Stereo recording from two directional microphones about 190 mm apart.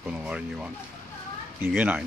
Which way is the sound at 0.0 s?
5° right (ahead or behind).